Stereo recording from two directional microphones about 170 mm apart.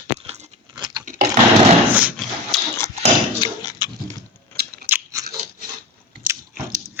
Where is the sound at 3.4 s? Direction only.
25° left (ahead or behind).